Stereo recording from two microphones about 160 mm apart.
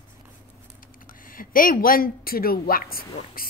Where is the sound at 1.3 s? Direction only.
60° left (ahead or behind).